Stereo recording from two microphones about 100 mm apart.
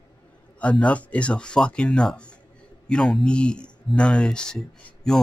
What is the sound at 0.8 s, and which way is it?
Speech, 15° left (ahead or behind).